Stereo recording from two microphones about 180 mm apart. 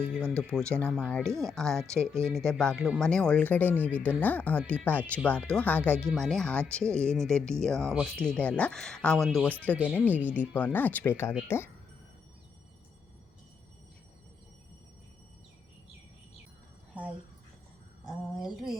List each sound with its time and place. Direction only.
0.0 s speech: 10° right (ahead or behind)
0.3 s speech: 5° left (ahead or behind)
1.3 s speech: 15° right (ahead or behind)
1.5 s speech: 5° left (ahead or behind)
1.8 s speech: 15° right (ahead or behind)
2.3 s speech: 5° left (ahead or behind)
9.7 s speech: 5° right (ahead or behind)
10.5 s speech: 10° left (ahead or behind)
16.9 s a sound: 10° right (ahead or behind)